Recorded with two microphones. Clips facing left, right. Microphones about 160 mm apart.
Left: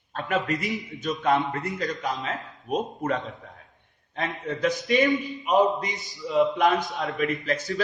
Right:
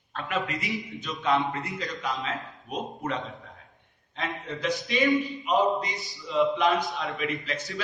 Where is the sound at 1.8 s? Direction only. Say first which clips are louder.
Left 3 dB; 50° left (ahead or behind).